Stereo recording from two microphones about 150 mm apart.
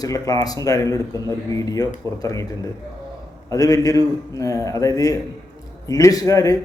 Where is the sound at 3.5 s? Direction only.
25° left (ahead or behind).